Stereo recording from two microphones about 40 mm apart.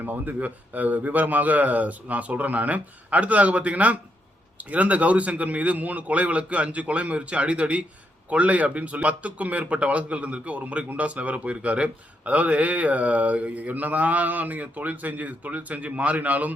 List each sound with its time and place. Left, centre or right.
0.0 s a man's voice: right